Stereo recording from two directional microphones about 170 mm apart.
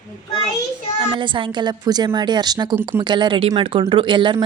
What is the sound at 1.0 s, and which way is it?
Speech, 30° right (ahead or behind).